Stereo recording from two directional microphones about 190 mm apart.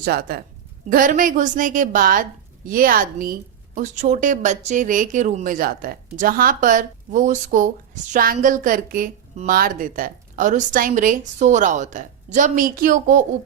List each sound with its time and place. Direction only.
0.0 s a woman's voice: 50° right (ahead or behind)